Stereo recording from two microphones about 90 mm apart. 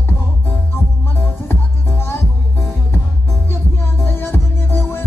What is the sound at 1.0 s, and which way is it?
Music, 25° left (ahead or behind).